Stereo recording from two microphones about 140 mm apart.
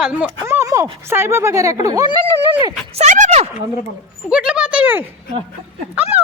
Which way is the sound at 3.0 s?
55° right (ahead or behind).